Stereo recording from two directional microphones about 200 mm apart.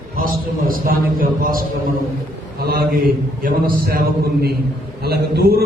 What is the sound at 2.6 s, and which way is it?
A man's voice, 50° right (ahead or behind).